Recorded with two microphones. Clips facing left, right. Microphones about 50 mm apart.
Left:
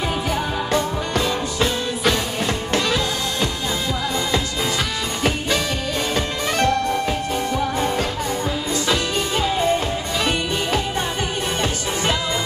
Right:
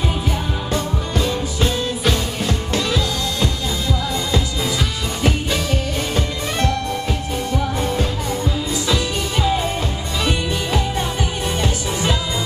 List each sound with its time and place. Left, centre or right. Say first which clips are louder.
0.7 s music: left 2 dB; left
7.8 s music: even; left